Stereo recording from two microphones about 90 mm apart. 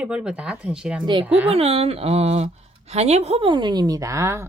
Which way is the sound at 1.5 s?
90° right.